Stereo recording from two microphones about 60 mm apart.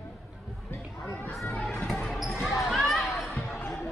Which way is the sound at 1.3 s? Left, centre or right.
Centre.